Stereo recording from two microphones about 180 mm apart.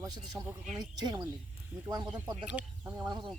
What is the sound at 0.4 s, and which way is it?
Speech, 15° right (ahead or behind).